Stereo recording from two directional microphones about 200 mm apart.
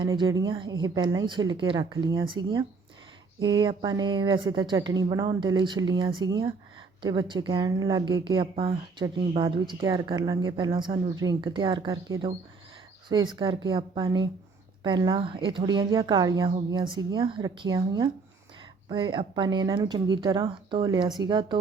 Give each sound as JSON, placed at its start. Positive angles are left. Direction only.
{"t": 0.0, "sound": "a woman's voice", "side_deg": -20}